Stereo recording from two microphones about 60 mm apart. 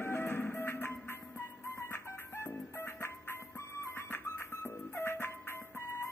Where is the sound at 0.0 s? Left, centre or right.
Left.